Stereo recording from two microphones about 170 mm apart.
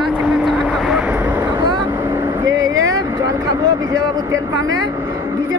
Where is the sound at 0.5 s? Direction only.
5° right (ahead or behind).